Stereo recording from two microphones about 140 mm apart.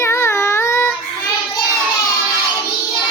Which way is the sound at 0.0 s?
20° left (ahead or behind).